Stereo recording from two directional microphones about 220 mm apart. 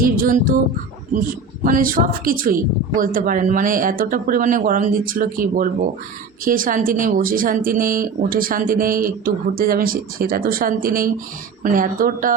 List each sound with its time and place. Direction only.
0.0 s music: 40° right (ahead or behind)
1.6 s speech: 40° right (ahead or behind)